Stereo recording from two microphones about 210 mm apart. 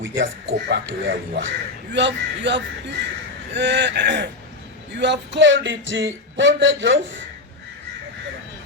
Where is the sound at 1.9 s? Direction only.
55° right (ahead or behind).